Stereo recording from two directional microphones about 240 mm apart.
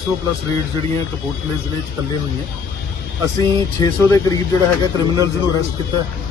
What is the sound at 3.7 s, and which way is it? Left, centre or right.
Speech, centre.